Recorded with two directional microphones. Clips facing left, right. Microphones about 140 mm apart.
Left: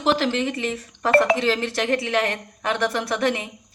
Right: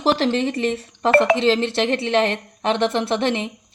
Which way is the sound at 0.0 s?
30° right (ahead or behind).